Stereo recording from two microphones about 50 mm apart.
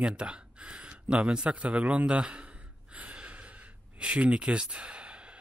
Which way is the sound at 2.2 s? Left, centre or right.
Right.